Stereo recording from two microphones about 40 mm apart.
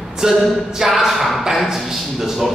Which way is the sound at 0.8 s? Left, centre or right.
Centre.